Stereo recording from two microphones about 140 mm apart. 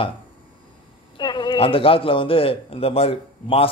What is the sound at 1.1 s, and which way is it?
A man's voice, 35° left (ahead or behind).